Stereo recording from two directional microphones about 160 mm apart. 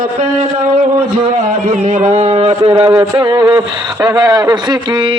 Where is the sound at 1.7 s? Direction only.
45° right (ahead or behind).